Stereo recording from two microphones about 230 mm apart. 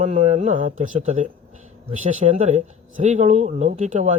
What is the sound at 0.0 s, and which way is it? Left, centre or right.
A man's voice, right.